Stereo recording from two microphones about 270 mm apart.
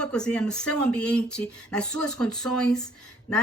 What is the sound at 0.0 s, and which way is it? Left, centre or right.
Speech, centre.